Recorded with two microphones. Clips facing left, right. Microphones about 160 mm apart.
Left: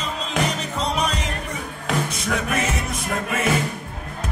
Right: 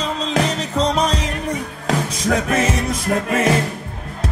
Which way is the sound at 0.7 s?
35° right (ahead or behind).